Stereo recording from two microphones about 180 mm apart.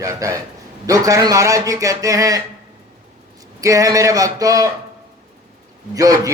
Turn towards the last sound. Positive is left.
turn(degrees=-20)  # may be behind; listen again after turning